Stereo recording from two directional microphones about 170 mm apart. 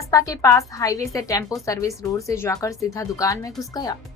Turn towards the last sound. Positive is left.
turn(degrees=20)  # may be behind; listen again after turning